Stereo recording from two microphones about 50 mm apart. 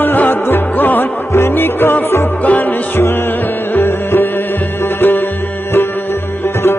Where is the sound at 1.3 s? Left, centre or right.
Left.